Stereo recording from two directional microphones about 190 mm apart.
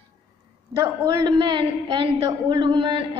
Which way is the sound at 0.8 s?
25° right (ahead or behind).